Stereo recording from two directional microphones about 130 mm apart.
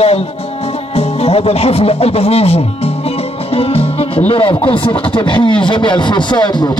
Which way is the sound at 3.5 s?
50° left (ahead or behind).